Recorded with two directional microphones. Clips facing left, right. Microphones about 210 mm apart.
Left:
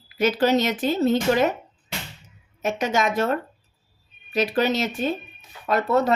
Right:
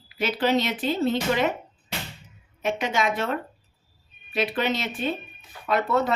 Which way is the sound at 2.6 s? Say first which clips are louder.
Left 2 dB; 45° left (ahead or behind).